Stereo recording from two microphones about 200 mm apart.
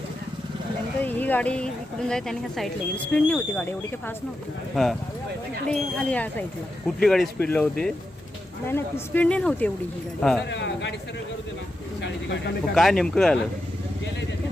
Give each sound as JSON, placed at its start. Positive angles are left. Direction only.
{"t": 1.0, "sound": "speech", "side_deg": 10}
{"t": 10.5, "sound": "speech", "side_deg": 65}
{"t": 12.0, "sound": "speech", "side_deg": 60}
{"t": 12.7, "sound": "speech", "side_deg": 0}